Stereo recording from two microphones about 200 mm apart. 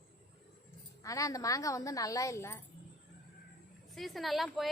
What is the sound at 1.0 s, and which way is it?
A woman's voice, 15° left (ahead or behind).